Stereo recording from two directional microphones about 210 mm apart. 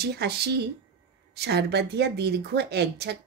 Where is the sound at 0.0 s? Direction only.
50° right (ahead or behind).